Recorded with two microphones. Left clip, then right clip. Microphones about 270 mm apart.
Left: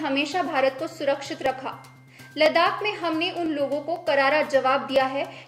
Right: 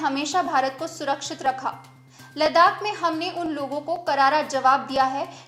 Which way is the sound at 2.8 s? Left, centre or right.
Right.